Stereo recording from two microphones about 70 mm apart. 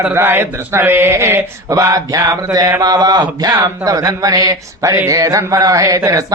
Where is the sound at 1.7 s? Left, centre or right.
Right.